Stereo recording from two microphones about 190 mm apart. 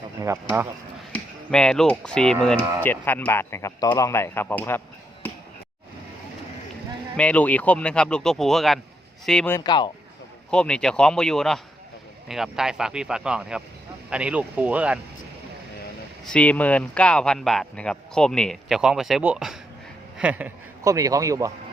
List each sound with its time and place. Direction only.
0.2 s speech: 15° right (ahead or behind)
1.1 s speech: 5° left (ahead or behind)
7.2 s speech: 5° left (ahead or behind)
9.5 s speech: 20° left (ahead or behind)
10.5 s speech: 5° left (ahead or behind)
16.2 s a man's voice: 5° left (ahead or behind); by 21.5 s 15° right (ahead or behind)